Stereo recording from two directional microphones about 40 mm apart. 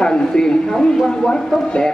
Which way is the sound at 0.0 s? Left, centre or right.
Centre.